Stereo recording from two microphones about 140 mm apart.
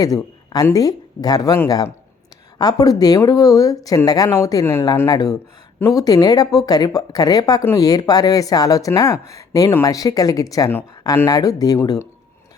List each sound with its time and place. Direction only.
0.0 s speech: 25° left (ahead or behind)